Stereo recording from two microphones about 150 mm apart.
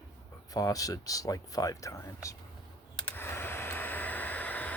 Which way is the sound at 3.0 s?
10° left (ahead or behind).